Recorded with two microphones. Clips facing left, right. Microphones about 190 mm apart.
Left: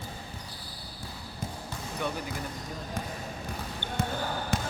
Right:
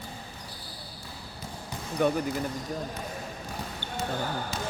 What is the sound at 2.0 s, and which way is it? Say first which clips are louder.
Speech: right 9 dB; 50° right (ahead or behind).